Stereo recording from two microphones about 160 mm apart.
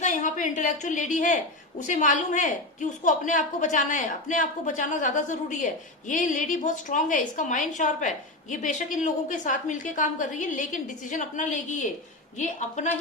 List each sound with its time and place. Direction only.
0.0 s a woman's voice: 50° left (ahead or behind)